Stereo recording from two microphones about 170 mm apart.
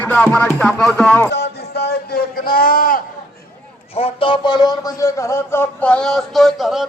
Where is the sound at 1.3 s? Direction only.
75° left (ahead or behind); by 3.0 s 55° left (ahead or behind).